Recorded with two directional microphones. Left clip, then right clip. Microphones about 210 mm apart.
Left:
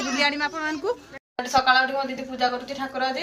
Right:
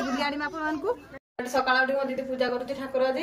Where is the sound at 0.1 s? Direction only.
5° left (ahead or behind).